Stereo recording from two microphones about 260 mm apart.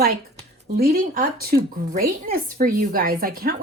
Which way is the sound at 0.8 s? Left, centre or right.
Right.